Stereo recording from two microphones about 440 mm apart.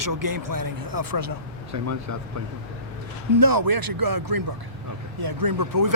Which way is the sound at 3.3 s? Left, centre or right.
Right.